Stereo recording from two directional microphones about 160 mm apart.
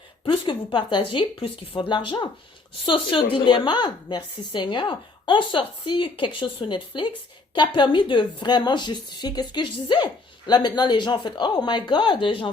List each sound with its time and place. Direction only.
0.3 s a woman's voice: 30° left (ahead or behind)